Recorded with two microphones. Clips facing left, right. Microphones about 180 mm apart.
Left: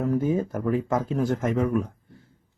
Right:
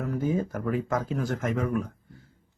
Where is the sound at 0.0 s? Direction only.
25° left (ahead or behind).